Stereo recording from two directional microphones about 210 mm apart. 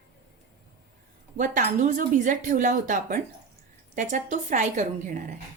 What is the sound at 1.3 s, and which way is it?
Speech, 35° right (ahead or behind).